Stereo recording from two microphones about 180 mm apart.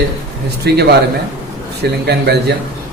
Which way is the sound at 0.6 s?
65° right (ahead or behind).